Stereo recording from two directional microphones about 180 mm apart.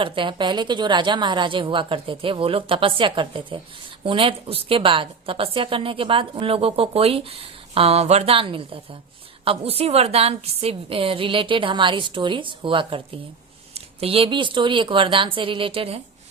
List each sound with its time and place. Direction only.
0.0 s a woman's voice: 25° right (ahead or behind)